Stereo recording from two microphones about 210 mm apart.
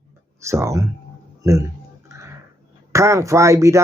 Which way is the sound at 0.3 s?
15° right (ahead or behind).